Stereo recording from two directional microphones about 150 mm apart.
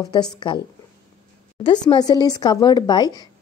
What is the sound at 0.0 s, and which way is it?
Speech, 25° left (ahead or behind).